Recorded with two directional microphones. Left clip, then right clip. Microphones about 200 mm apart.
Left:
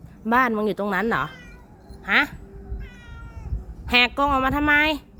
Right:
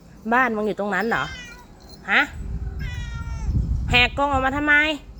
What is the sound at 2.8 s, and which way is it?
Cat, 10° left (ahead or behind).